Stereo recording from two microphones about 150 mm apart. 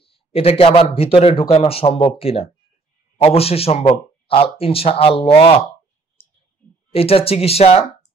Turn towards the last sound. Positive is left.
turn(degrees=45)  # may be behind; listen again after turning